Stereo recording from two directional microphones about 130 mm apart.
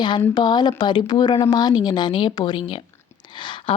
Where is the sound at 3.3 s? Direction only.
40° left (ahead or behind).